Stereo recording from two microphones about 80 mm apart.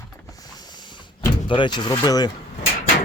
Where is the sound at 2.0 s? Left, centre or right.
Left.